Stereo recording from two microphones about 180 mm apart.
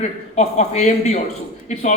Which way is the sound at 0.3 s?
40° left (ahead or behind).